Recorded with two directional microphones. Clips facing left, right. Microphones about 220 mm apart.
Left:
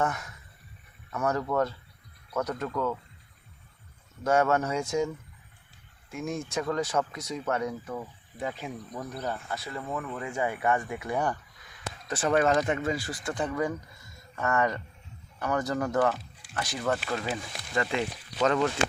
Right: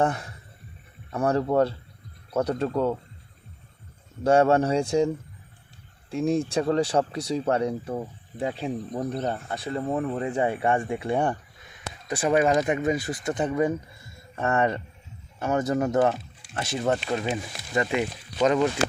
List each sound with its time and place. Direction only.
0.0 s speech: 30° right (ahead or behind)
4.2 s speech: 30° right (ahead or behind)
12.0 s speech: 15° right (ahead or behind)